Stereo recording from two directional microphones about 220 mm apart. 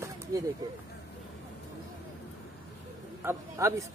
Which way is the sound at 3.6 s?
15° right (ahead or behind).